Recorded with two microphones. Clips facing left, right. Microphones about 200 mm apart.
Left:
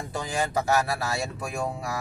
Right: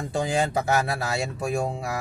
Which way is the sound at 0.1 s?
25° right (ahead or behind).